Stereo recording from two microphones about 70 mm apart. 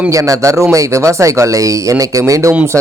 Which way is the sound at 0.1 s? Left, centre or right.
Right.